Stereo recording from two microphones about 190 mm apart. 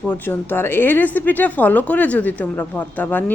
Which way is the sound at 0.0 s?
10° left (ahead or behind).